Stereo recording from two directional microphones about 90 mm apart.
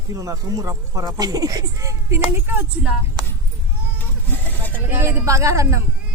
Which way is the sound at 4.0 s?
20° left (ahead or behind).